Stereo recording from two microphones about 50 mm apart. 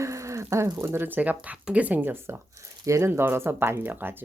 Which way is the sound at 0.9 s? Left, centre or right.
Right.